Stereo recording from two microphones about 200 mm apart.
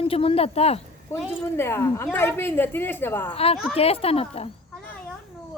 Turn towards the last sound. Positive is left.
turn(degrees=30)  # may be behind; listen again after turning